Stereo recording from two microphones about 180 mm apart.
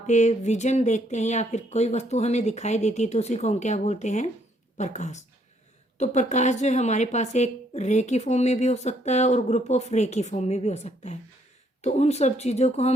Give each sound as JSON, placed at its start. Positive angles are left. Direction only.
{"t": 0.1, "sound": "a woman's voice", "side_deg": 40}